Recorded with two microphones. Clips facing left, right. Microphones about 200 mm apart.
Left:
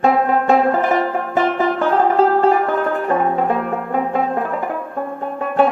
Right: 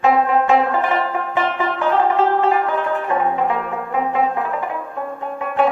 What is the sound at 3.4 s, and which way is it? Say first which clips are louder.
Music: left 2 dB; 45° left (ahead or behind).